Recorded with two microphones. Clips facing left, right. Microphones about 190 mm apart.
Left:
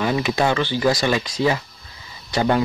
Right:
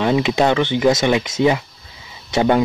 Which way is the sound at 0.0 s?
20° right (ahead or behind).